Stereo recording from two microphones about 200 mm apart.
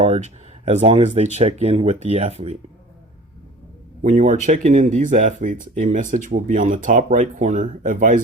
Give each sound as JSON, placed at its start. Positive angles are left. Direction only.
{"t": 0.0, "sound": "speech", "side_deg": -30}
{"t": 4.0, "sound": "speech", "side_deg": -35}